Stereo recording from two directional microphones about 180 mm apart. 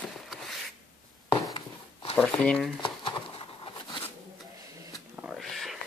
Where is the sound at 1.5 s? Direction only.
25° left (ahead or behind).